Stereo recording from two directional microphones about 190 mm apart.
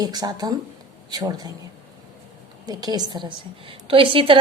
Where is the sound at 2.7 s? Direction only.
20° right (ahead or behind).